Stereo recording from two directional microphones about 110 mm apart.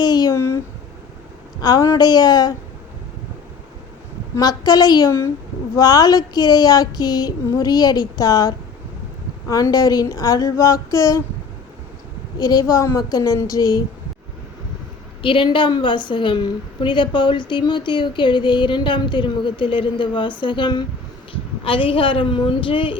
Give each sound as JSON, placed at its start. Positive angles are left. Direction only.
{"t": 0.0, "sound": "a sound", "side_deg": 35}
{"t": 0.3, "sound": "a sound", "side_deg": 25}
{"t": 1.6, "sound": "speech", "side_deg": 35}
{"t": 4.4, "sound": "speech", "side_deg": 40}
{"t": 12.4, "sound": "speech", "side_deg": 35}
{"t": 15.2, "sound": "speech", "side_deg": 50}